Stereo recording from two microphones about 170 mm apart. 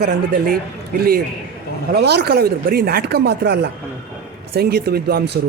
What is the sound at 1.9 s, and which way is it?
Speech, 75° right (ahead or behind).